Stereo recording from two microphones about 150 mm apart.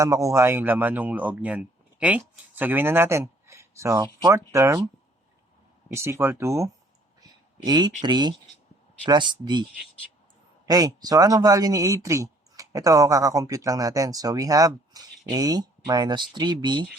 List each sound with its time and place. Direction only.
0.0 s speech: 20° right (ahead or behind)
5.9 s speech: 15° right (ahead or behind)
10.7 s speech: 25° right (ahead or behind)